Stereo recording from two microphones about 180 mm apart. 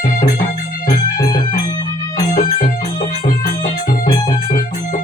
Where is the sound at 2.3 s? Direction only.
50° left (ahead or behind).